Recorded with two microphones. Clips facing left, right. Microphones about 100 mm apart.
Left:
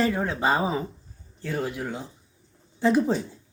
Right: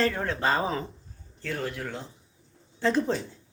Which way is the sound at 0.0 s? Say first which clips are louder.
Left 2 dB; 15° left (ahead or behind).